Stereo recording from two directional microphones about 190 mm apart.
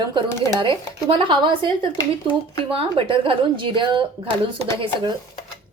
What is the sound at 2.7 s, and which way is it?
A woman's voice, 30° right (ahead or behind).